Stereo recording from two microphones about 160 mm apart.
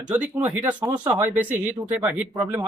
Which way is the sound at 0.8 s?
25° right (ahead or behind).